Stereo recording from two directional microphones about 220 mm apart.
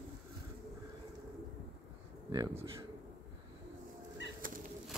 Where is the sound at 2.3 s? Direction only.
20° right (ahead or behind).